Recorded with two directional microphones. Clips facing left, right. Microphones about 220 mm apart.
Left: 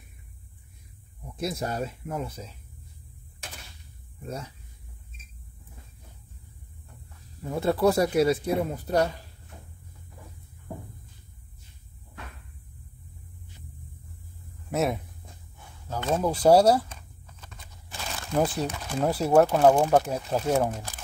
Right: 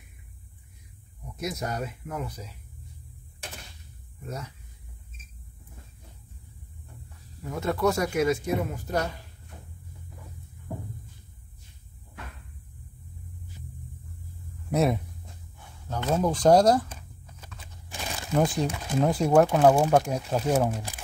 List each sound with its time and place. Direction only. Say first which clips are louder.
1.3 s speech: left 2 dB; 30° left (ahead or behind)
7.5 s speech: left 3 dB; 35° left (ahead or behind)
14.7 s speech: right 2 dB; centre (ahead or behind)
17.4 s crumpling: right 2 dB; 10° right (ahead or behind)
18.3 s speech: right 1 dB; 5° left (ahead or behind)
18.7 s speech: right 3 dB; 10° right (ahead or behind)
19.0 s speech: left 1 dB; 5° left (ahead or behind)
20.7 s speech: right 2 dB; 15° right (ahead or behind)